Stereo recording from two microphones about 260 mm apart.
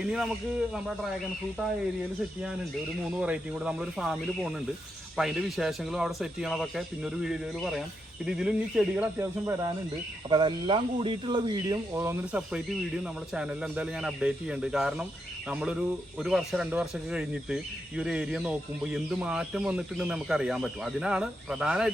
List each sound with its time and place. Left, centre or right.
3.0 s speech: centre
16.2 s speech: centre